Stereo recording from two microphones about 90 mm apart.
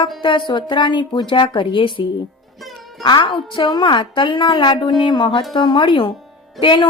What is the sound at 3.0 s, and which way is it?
A woman's voice, 60° left (ahead or behind).